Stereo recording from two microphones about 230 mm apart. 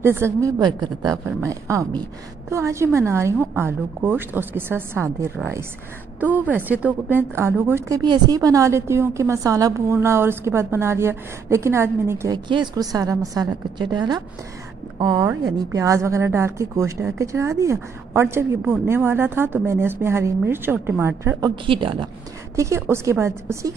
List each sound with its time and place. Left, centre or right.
0.0 s a woman's voice: centre
21.6 s a woman's voice: right